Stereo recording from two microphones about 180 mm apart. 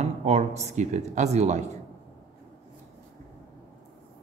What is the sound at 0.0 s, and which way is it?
Speech, 40° right (ahead or behind).